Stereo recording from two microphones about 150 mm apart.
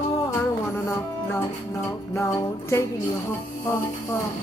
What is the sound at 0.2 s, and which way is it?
Music, 15° left (ahead or behind).